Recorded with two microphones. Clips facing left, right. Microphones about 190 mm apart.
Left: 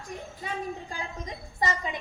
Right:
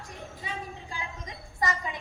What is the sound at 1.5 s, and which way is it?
Speech, 20° left (ahead or behind).